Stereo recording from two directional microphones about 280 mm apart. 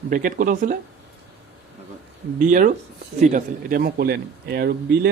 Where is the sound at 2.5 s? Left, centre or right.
Right.